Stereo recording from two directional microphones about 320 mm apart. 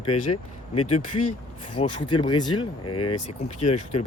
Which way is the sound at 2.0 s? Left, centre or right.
Centre.